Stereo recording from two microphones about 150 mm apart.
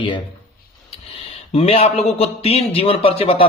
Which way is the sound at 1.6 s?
40° left (ahead or behind).